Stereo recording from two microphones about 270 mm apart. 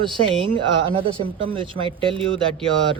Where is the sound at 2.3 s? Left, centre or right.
Centre.